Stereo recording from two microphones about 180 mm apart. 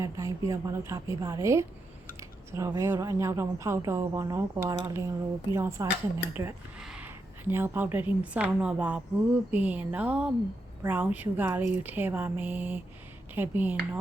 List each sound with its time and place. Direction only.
0.0 s a woman's voice: 20° right (ahead or behind)